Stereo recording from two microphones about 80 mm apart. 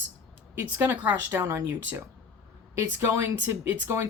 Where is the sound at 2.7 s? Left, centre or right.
Right.